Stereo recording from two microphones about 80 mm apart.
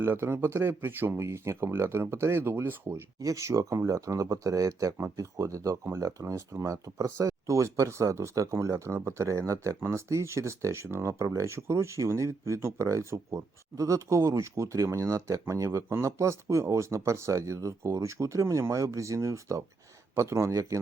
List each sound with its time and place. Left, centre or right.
0.0 s speech: right
2.9 s speech: right